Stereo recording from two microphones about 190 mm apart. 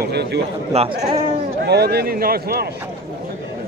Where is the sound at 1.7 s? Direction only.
60° right (ahead or behind).